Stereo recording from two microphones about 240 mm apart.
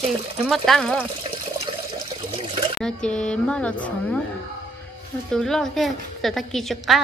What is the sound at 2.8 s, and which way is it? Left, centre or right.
A woman's voice, centre.